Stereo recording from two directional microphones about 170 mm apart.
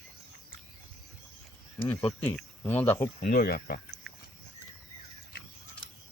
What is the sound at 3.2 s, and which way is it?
Speech, 65° left (ahead or behind).